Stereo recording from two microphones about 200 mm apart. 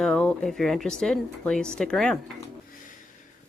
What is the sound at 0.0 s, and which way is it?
Speech, 5° left (ahead or behind).